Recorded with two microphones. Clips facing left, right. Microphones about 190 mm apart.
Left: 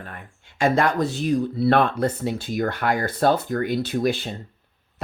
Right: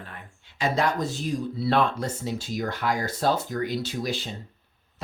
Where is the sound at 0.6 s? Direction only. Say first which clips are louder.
Left 5 dB; 55° left (ahead or behind).